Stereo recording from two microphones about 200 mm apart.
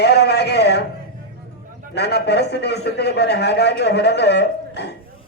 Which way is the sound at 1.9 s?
55° left (ahead or behind).